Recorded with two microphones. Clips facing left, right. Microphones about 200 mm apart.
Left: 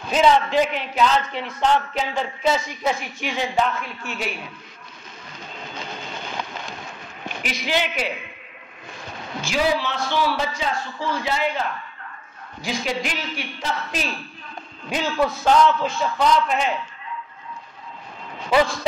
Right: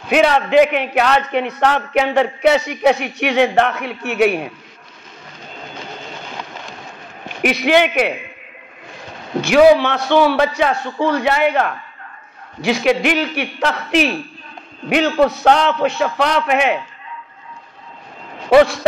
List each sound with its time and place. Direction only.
0.1 s a man's voice: 65° right (ahead or behind)
7.4 s a man's voice: 65° right (ahead or behind)
9.4 s a man's voice: 65° right (ahead or behind)
18.5 s a man's voice: 65° right (ahead or behind)